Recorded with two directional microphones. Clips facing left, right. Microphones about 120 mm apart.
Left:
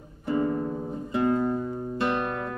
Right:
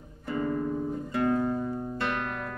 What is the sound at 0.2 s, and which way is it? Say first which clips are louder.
Music: left 3 dB; 25° left (ahead or behind).